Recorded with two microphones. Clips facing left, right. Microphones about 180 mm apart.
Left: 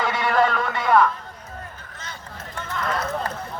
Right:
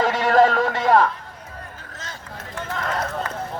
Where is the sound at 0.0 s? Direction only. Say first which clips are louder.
Right 4 dB; 40° right (ahead or behind).